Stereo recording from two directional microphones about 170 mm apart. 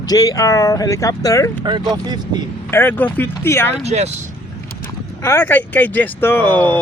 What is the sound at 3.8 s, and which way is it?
Speech, 40° right (ahead or behind).